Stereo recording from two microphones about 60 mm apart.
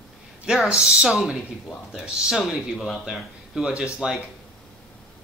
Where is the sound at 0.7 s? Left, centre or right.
Centre.